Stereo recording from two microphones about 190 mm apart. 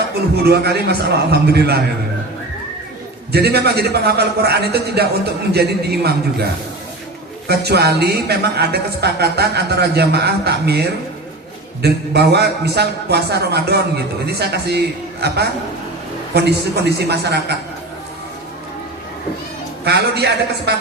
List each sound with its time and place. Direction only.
0.4 s a man's voice: 60° right (ahead or behind)
3.3 s a man's voice: 60° right (ahead or behind)
19.8 s a man's voice: 60° right (ahead or behind)